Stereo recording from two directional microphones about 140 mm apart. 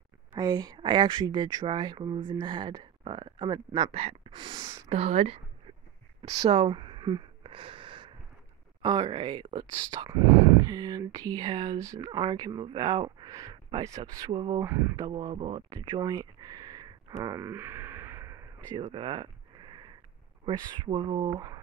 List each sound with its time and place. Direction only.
0.4 s speech: 30° right (ahead or behind)
3.9 s speech: 45° right (ahead or behind); by 4.8 s 30° right (ahead or behind)
4.8 s speech: 45° right (ahead or behind)
6.2 s a sound: 45° right (ahead or behind)
8.8 s speech: 30° right (ahead or behind)
14.3 s speech: 40° right (ahead or behind)
14.6 s speech: 20° right (ahead or behind)
15.0 s speech: 30° right (ahead or behind)
15.3 s a sound: 35° right (ahead or behind); by 18.8 s 15° right (ahead or behind)
18.9 s sniff: 35° right (ahead or behind)
20.4 s speech: 35° right (ahead or behind)